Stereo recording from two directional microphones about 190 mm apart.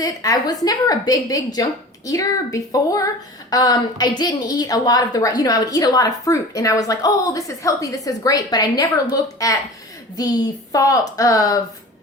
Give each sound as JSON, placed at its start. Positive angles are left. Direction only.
{"t": 0.0, "sound": "a woman's voice", "side_deg": 20}